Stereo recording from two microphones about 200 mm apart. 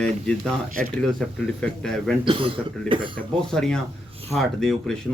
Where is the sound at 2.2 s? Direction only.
25° right (ahead or behind).